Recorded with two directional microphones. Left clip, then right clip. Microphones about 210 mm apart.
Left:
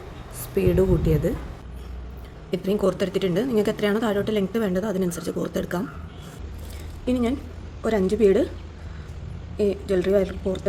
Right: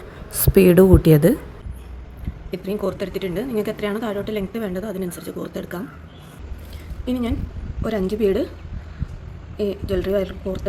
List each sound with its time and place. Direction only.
0.3 s a woman's voice: 40° right (ahead or behind)
2.5 s a woman's voice: 15° left (ahead or behind)
7.0 s a woman's voice: 5° left (ahead or behind)
9.6 s speech: 5° left (ahead or behind)